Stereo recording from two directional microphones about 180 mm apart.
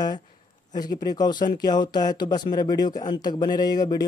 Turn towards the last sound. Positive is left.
turn(degrees=20)  # may be behind; listen again after turning